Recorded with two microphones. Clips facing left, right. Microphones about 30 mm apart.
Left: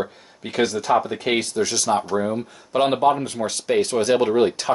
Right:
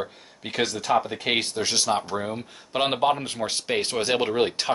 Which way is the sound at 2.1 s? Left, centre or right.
Centre.